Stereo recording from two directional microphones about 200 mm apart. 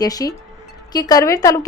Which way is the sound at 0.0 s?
20° left (ahead or behind).